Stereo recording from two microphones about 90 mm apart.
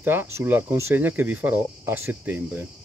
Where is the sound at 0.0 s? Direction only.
25° right (ahead or behind).